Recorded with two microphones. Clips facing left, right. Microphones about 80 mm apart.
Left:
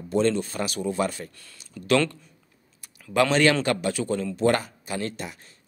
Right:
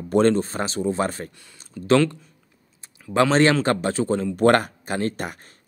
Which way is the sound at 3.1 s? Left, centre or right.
Right.